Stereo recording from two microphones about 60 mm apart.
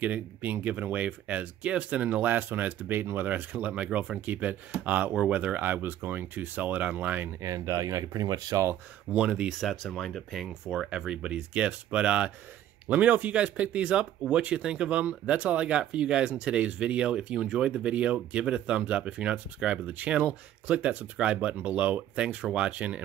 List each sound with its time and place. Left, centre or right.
0.0 s speech: right
7.4 s speech: right
9.1 s speech: centre
9.5 s speech: centre
10.4 s speech: centre
10.9 s speech: centre